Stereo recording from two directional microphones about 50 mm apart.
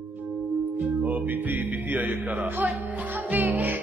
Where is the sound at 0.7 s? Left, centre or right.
Right.